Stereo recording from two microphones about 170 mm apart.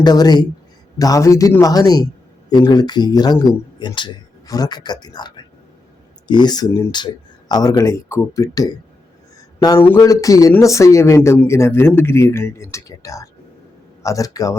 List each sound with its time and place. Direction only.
0.0 s speech: 25° left (ahead or behind)